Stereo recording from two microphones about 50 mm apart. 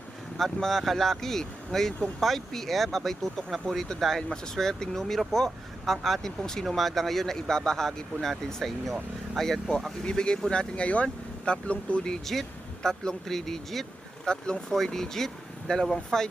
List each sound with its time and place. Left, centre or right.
0.3 s speech: centre
10.1 s speech: centre
12.0 s speech: centre